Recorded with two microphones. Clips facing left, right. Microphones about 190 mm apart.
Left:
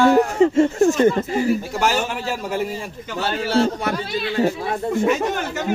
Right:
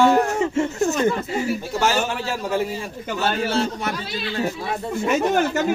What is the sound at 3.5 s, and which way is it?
Speech, 35° left (ahead or behind).